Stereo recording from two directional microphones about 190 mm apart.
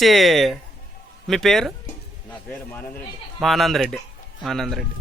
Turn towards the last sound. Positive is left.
turn(degrees=0)  # may be behind; listen again after turning